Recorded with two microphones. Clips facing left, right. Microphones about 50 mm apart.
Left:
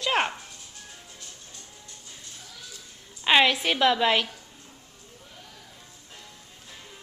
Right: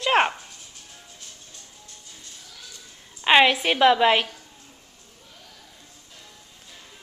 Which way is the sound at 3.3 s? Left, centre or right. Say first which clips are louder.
Right 3 dB; centre.